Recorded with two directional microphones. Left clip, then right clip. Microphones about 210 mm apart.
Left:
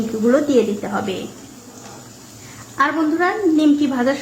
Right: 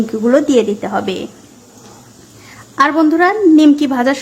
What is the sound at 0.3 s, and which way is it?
Speech, 30° right (ahead or behind).